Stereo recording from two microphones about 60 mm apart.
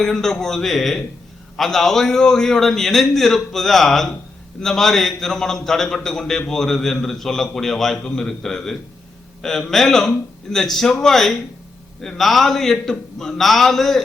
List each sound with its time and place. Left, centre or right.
0.0 s a man's voice: centre